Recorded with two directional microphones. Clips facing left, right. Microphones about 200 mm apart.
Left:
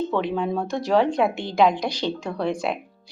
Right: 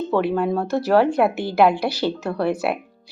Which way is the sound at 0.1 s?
5° right (ahead or behind).